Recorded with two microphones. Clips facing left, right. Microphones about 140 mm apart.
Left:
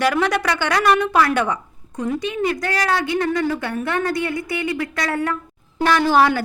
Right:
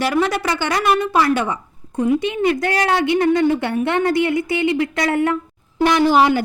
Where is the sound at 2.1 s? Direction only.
25° right (ahead or behind).